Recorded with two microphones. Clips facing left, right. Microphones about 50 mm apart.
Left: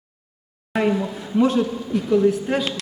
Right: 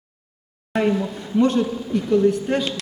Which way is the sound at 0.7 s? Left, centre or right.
Centre.